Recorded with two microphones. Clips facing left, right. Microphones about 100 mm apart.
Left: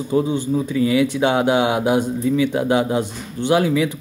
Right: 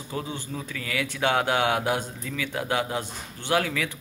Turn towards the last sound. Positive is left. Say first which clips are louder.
# left 9 dB
turn(degrees=20)  # may be behind; listen again after turning